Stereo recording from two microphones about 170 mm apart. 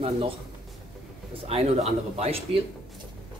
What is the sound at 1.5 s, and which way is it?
Speech, 35° right (ahead or behind).